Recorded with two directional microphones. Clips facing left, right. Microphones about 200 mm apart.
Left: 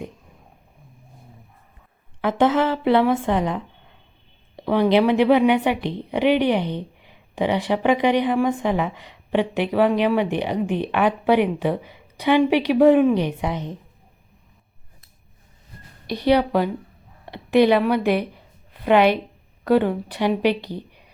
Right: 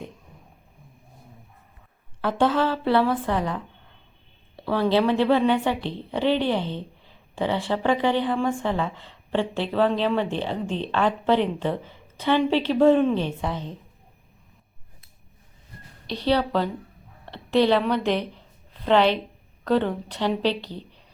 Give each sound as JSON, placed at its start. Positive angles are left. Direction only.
{"t": 2.2, "sound": "a woman's voice", "side_deg": 15}
{"t": 16.0, "sound": "a woman's voice", "side_deg": 10}